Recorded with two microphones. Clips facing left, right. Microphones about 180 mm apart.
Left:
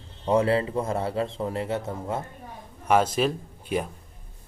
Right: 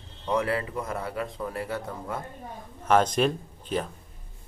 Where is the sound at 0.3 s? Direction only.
25° left (ahead or behind).